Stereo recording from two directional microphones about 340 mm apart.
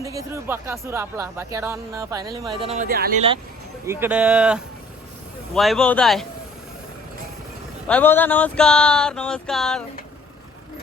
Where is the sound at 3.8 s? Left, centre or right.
Centre.